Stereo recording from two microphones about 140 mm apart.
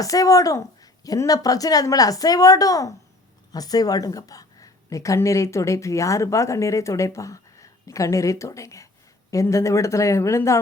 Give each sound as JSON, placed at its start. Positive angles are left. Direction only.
{"t": 0.0, "sound": "a woman's voice", "side_deg": 25}